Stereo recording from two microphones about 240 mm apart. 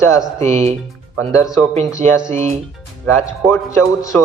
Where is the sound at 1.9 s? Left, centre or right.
Centre.